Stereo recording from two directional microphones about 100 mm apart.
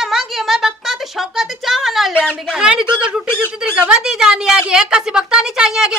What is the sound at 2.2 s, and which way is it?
Speech, 20° left (ahead or behind).